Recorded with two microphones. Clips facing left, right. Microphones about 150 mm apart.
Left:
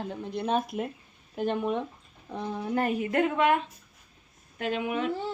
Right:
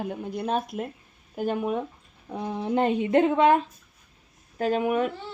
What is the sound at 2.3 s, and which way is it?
Speech, 15° right (ahead or behind).